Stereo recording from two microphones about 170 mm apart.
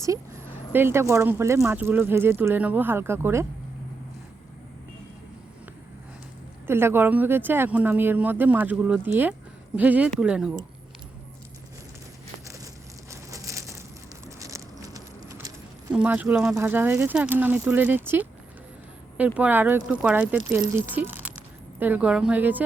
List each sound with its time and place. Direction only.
0.0 s speech: 15° right (ahead or behind)
6.7 s speech: 15° right (ahead or behind)
12.5 s crumpling: 20° right (ahead or behind)
14.3 s keys jangling: 20° right (ahead or behind)
15.9 s speech: 10° right (ahead or behind)